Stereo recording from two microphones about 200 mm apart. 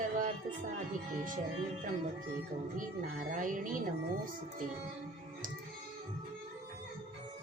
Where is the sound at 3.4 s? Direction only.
40° right (ahead or behind).